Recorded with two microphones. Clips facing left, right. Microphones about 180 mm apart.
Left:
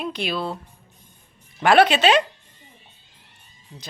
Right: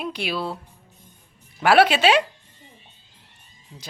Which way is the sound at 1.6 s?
5° right (ahead or behind).